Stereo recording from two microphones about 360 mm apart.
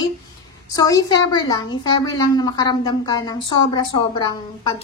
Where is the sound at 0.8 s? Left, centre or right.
Centre.